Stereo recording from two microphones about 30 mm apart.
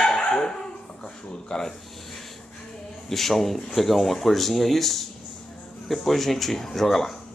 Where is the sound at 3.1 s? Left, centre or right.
Centre.